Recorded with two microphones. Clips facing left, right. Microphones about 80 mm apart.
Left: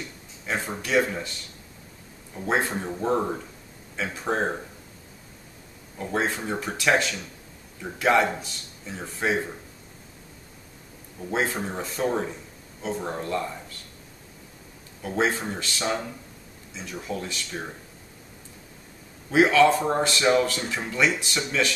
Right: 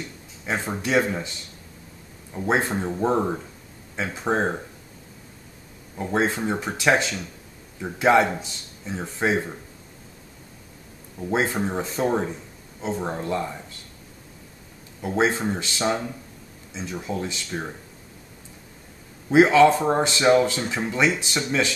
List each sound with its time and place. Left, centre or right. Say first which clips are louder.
0.8 s speech: right 1 dB; right
2.3 s speech: right 2 dB; centre
5.9 s speech: right 3 dB; right
11.1 s speech: right 3 dB; right
15.0 s speech: right 3 dB; right
19.3 s speech: right 3 dB; right